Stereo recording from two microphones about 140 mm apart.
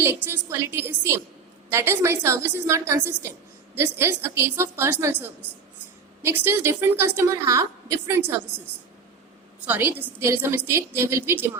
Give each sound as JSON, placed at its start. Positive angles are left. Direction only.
{"t": 0.0, "sound": "a woman's voice", "side_deg": -15}
{"t": 9.6, "sound": "a woman's voice", "side_deg": -10}